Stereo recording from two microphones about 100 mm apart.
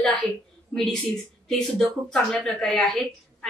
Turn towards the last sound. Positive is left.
turn(degrees=5)  # may be behind; listen again after turning